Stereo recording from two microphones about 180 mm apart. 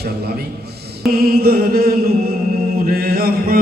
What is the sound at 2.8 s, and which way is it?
Mantra, 55° right (ahead or behind).